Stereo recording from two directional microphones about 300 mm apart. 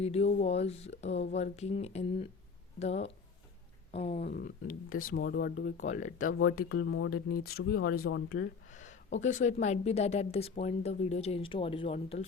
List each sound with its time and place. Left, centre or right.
0.0 s speech: left
4.2 s speech: left
6.7 s speech: left
7.9 s speech: left
8.7 s a sound: left
9.1 s speech: left